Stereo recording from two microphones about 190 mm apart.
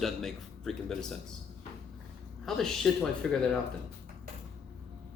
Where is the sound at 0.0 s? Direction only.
Centre (ahead or behind).